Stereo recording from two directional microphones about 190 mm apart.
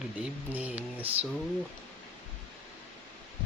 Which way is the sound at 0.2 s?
10° right (ahead or behind).